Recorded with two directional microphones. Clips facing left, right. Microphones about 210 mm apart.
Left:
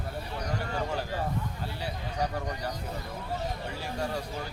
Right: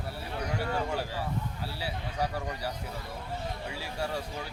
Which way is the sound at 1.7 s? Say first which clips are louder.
Even; 5° right (ahead or behind).